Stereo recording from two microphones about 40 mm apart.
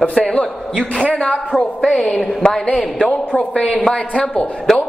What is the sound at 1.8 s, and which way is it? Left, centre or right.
Speech, centre.